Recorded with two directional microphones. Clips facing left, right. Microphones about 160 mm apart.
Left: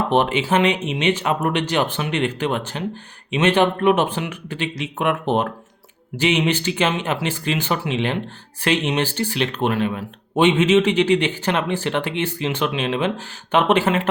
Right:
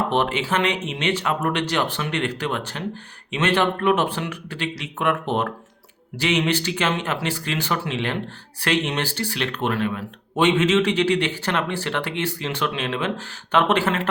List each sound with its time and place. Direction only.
0.1 s a man's voice: 15° left (ahead or behind)